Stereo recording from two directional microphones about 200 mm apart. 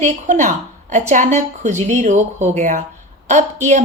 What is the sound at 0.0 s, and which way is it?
A woman's voice, 35° right (ahead or behind).